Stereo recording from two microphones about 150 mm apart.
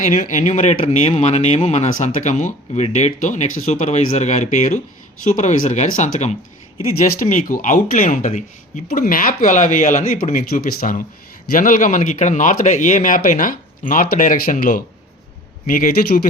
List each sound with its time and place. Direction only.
0.0 s speech: 55° left (ahead or behind)
7.0 s speech: 60° left (ahead or behind)